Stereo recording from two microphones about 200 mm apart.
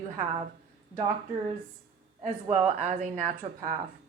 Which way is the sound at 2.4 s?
35° right (ahead or behind).